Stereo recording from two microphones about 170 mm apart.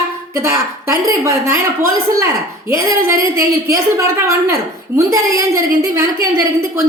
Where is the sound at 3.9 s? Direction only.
15° right (ahead or behind).